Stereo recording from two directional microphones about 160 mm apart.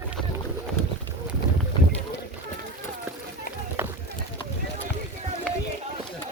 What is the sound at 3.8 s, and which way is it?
Run, 15° right (ahead or behind).